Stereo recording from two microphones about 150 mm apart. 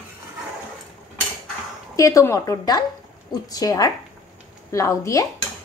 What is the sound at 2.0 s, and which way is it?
Speech, 20° left (ahead or behind).